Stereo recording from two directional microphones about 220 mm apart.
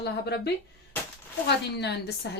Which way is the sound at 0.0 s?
50° left (ahead or behind).